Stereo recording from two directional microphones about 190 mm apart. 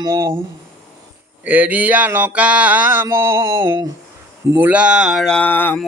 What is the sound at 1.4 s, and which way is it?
Mantra, 10° right (ahead or behind).